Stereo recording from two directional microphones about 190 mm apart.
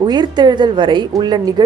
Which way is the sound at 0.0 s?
20° right (ahead or behind).